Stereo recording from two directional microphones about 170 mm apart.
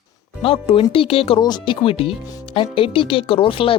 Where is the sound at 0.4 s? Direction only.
35° left (ahead or behind).